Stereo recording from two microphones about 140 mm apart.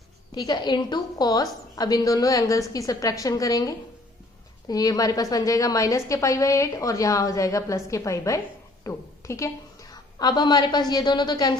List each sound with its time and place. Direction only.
0.3 s a woman's voice: 30° left (ahead or behind)